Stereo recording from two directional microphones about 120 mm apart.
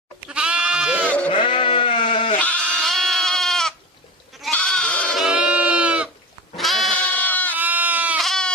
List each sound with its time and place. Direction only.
0.3 s goat: 10° right (ahead or behind)
1.0 s sheep: 10° left (ahead or behind)
1.3 s sheep: 45° left (ahead or behind)
2.4 s goat: 10° left (ahead or behind)
5.1 s goat: 5° right (ahead or behind)
6.9 s goat: 10° left (ahead or behind)
7.5 s goat: 15° right (ahead or behind)
8.2 s goat: 5° left (ahead or behind)